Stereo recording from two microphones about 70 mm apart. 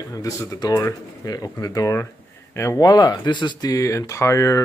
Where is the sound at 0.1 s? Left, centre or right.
Left.